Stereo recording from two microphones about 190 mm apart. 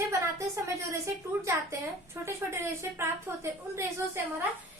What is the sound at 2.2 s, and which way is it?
A woman's voice, 15° right (ahead or behind).